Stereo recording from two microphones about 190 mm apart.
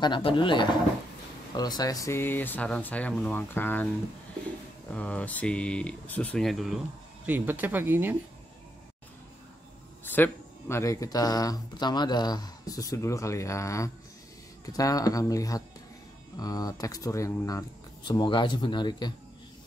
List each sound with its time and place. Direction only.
0.0 s speech: 25° left (ahead or behind); by 3.9 s 10° left (ahead or behind)
4.9 s speech: 5° left (ahead or behind); by 8.2 s 10° right (ahead or behind)
10.0 s speech: 10° left (ahead or behind)